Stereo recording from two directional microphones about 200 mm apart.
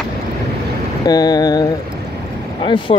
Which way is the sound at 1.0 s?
20° left (ahead or behind).